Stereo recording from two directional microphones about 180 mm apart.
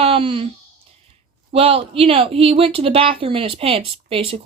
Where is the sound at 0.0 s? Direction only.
30° right (ahead or behind).